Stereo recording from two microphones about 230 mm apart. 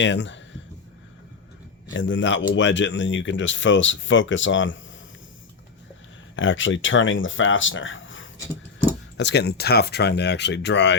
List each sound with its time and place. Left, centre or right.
0.0 s speech: left
1.9 s speech: left
6.3 s speech: left